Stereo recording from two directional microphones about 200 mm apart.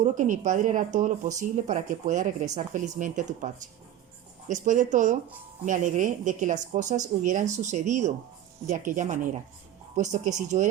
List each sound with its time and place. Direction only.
0.0 s speech: 40° right (ahead or behind)